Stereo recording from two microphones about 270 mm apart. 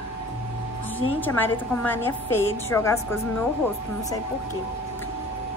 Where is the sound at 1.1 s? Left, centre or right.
Centre.